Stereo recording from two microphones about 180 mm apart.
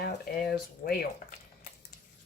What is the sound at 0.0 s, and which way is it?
Speech, 65° left (ahead or behind).